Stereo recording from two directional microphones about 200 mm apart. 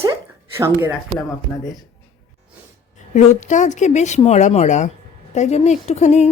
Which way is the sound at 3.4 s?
35° left (ahead or behind).